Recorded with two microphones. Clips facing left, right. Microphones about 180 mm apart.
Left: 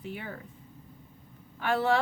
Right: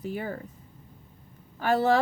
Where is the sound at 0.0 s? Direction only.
40° right (ahead or behind).